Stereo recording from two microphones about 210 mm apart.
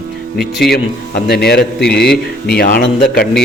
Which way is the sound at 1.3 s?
50° left (ahead or behind).